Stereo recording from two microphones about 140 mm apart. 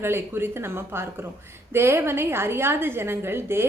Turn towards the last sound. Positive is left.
turn(degrees=-15)  # may be behind; listen again after turning